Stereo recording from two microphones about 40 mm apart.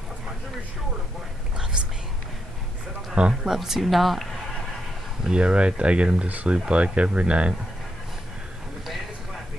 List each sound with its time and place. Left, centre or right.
3.4 s speech: centre
5.2 s speech: right
6.2 s speech: right
6.7 s speech: right